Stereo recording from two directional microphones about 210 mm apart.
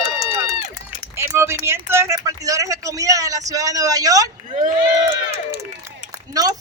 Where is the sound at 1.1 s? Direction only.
10° right (ahead or behind).